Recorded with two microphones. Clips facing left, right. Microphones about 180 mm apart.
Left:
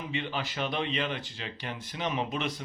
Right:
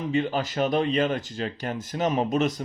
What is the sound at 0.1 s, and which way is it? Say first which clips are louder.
Speech: right 10 dB; 45° right (ahead or behind).